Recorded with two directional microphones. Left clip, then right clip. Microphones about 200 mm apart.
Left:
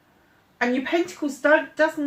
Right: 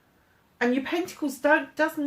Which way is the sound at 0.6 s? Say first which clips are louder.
Left 3 dB; 45° right (ahead or behind).